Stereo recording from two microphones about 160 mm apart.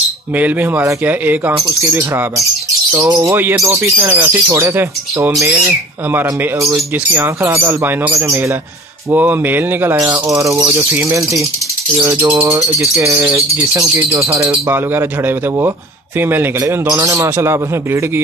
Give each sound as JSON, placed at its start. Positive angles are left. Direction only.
{"t": 0.4, "sound": "speech", "side_deg": -10}